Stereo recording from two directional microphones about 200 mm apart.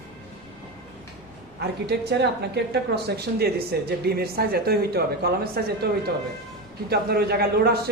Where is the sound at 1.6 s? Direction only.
55° right (ahead or behind).